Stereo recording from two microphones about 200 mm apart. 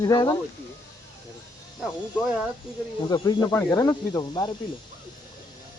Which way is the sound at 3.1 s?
20° left (ahead or behind).